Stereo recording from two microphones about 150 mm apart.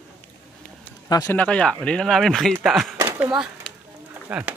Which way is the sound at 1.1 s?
20° left (ahead or behind).